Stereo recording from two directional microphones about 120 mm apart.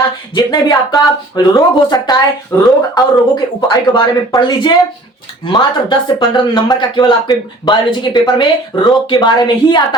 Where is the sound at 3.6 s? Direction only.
35° left (ahead or behind).